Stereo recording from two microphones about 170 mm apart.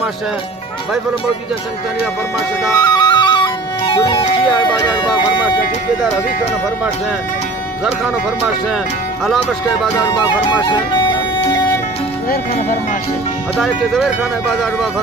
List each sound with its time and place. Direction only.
2.6 s music: 25° left (ahead or behind)
9.2 s speech: centre (ahead or behind)
13.6 s speech: centre (ahead or behind)